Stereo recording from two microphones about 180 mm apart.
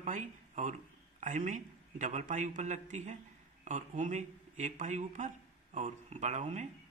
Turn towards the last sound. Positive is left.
turn(degrees=-40)  # may be behind; listen again after turning